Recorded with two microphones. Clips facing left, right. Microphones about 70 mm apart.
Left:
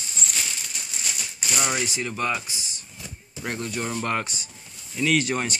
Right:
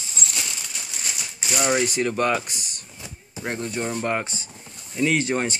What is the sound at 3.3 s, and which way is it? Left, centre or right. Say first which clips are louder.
Speech: right 2 dB; right.